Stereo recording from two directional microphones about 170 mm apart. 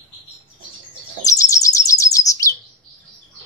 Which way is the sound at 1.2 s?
20° left (ahead or behind).